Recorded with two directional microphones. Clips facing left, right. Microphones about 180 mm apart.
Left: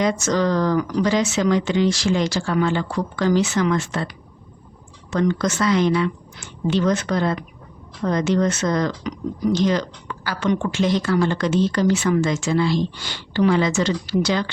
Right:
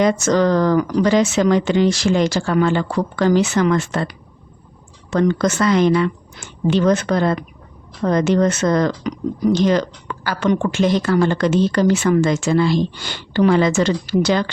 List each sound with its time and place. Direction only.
0.0 s speech: 55° right (ahead or behind)
5.1 s speech: 55° right (ahead or behind)